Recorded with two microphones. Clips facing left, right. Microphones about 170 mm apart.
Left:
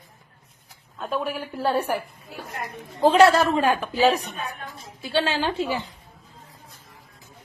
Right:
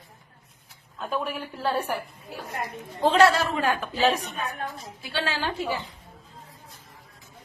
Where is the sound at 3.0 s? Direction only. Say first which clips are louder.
Left 4 dB; 10° left (ahead or behind).